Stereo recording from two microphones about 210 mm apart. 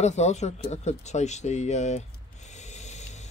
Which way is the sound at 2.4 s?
35° left (ahead or behind).